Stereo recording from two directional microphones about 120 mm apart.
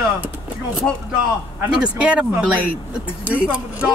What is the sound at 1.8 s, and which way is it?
Speech, 10° right (ahead or behind).